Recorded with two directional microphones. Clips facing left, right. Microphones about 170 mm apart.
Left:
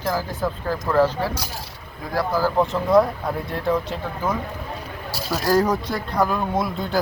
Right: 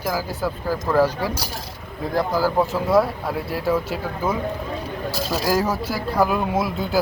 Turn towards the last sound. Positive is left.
turn(degrees=-5)  # may be behind; listen again after turning